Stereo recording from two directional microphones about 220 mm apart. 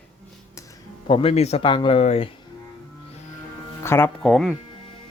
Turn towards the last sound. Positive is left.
turn(degrees=0)  # may be behind; listen again after turning